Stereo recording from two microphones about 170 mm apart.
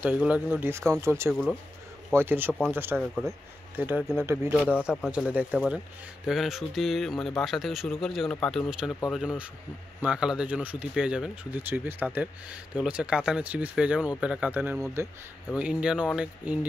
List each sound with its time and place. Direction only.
0.3 s speech: 10° right (ahead or behind)
1.3 s speech: 5° left (ahead or behind)
2.1 s speech: 10° right (ahead or behind)
3.0 s speech: 5° left (ahead or behind)
3.7 s speech: 10° right (ahead or behind)